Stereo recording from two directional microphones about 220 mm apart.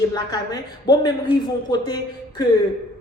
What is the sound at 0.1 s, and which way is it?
Speech, 15° left (ahead or behind).